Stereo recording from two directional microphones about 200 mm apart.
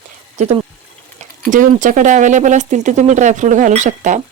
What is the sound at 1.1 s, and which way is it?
Speech, 40° right (ahead or behind).